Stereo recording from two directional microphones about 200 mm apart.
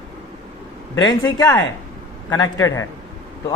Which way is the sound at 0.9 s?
15° left (ahead or behind).